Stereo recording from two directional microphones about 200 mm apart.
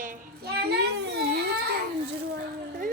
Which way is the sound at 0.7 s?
55° right (ahead or behind).